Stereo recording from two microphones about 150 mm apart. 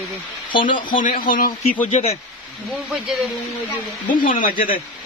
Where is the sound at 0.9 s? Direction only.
65° left (ahead or behind).